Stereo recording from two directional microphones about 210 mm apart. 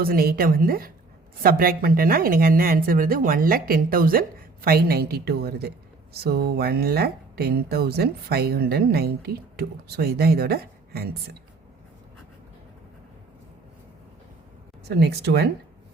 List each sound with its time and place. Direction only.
0.0 s speech: 45° right (ahead or behind)
14.8 s speech: 50° right (ahead or behind)